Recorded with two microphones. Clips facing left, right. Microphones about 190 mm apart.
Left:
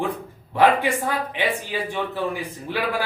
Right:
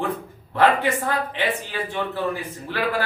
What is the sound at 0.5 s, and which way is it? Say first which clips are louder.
Speech: left 1 dB; 15° left (ahead or behind).